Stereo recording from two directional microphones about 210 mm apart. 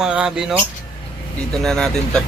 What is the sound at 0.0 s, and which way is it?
Speech, 5° right (ahead or behind).